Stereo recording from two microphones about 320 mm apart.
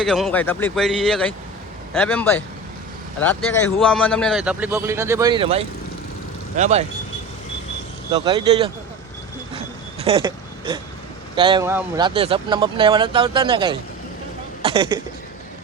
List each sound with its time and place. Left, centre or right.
0.0 s a man's voice: centre; by 6.8 s right
8.1 s speech: centre
10.0 s speech: centre
14.6 s a sound: centre